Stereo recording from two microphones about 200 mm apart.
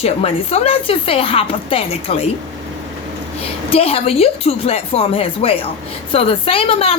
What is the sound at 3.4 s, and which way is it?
A woman's voice, 30° left (ahead or behind).